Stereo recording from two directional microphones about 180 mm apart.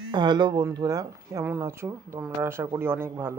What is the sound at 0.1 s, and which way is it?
Speech, 25° right (ahead or behind).